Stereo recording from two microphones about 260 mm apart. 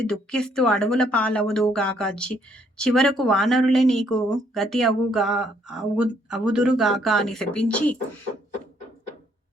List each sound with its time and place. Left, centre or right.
0.1 s speech: centre